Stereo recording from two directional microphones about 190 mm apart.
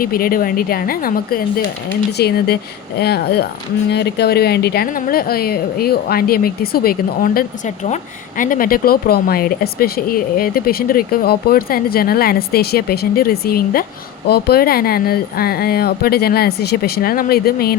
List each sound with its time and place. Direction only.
0.0 s speech: 50° left (ahead or behind)